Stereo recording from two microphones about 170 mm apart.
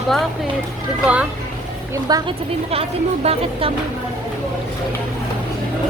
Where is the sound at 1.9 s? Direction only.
20° right (ahead or behind).